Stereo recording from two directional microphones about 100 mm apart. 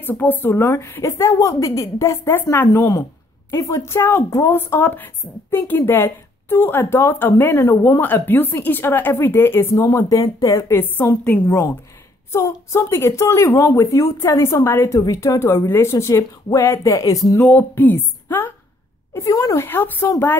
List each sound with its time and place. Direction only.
0.0 s a woman's voice: 15° left (ahead or behind); by 2.1 s 35° left (ahead or behind)
2.5 s a woman's voice: 20° left (ahead or behind)
7.6 s speech: 35° left (ahead or behind)
8.0 s a woman's voice: 20° left (ahead or behind)
9.8 s a woman's voice: 35° left (ahead or behind)
17.4 s a woman's voice: 20° left (ahead or behind)
19.1 s a woman's voice: 35° left (ahead or behind)